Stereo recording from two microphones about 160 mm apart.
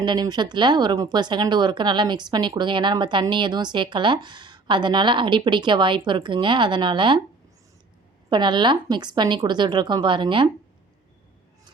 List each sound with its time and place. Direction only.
0.0 s a woman's voice: 25° right (ahead or behind)
8.3 s a woman's voice: 30° right (ahead or behind)